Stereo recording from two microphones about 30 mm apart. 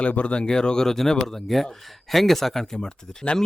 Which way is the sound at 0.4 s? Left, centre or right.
Left.